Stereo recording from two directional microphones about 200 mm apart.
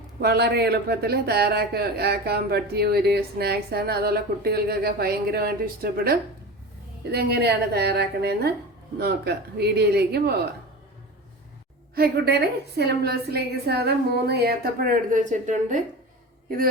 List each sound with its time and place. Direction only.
0.2 s speech: 55° right (ahead or behind)
11.9 s speech: 50° right (ahead or behind)